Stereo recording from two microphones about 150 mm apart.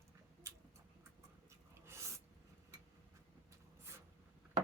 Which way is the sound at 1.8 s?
20° right (ahead or behind).